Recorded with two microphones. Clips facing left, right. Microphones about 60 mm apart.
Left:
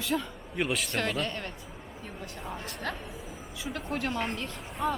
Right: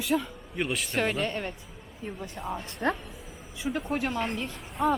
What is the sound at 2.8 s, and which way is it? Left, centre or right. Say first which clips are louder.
Speech: right 8 dB; right.